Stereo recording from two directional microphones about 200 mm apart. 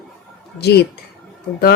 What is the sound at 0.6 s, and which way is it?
Speech, 55° left (ahead or behind).